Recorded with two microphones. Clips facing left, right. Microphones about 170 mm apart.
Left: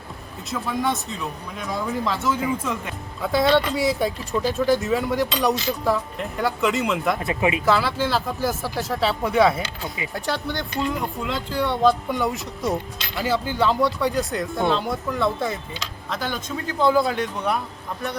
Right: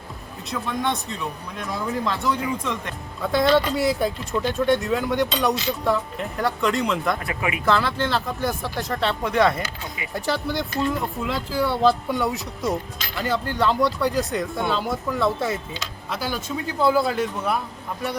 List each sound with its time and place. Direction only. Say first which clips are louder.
0.5 s speech: left 1 dB; 5° left (ahead or behind)
7.2 s speech: left 5 dB; 25° left (ahead or behind)
7.6 s speech: left 1 dB; 5° left (ahead or behind)